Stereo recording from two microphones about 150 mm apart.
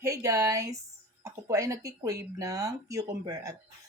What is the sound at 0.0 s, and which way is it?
Speech, 20° right (ahead or behind).